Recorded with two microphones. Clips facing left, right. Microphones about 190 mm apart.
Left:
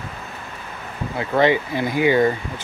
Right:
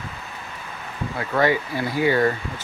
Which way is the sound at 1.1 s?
20° left (ahead or behind).